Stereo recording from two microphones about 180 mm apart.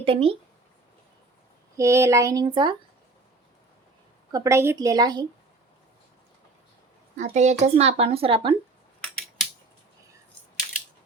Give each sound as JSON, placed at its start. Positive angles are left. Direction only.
{"t": 0.0, "sound": "speech", "side_deg": -30}
{"t": 1.7, "sound": "speech", "side_deg": -15}
{"t": 4.3, "sound": "speech", "side_deg": -15}
{"t": 7.2, "sound": "speech", "side_deg": -40}